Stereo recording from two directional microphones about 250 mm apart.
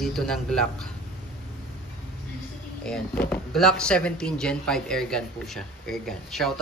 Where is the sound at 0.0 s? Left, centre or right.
Centre.